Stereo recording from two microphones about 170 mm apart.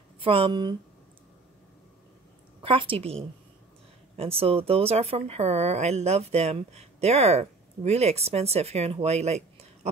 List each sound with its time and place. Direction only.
0.2 s speech: 30° right (ahead or behind)
2.6 s speech: 30° right (ahead or behind)
4.2 s speech: 35° right (ahead or behind)